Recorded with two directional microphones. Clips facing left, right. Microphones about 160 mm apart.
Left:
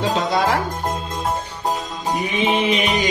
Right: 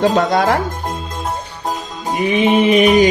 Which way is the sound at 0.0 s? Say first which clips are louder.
Right 5 dB; 55° right (ahead or behind).